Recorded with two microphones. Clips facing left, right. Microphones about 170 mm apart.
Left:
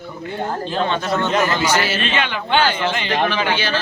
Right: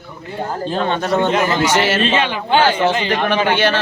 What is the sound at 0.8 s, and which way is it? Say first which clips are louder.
Speech: right 6 dB; 50° right (ahead or behind).